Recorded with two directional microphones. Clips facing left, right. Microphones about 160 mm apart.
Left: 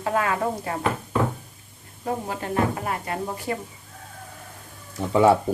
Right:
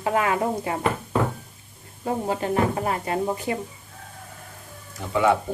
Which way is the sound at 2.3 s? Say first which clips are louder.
Right 3 dB; 25° right (ahead or behind).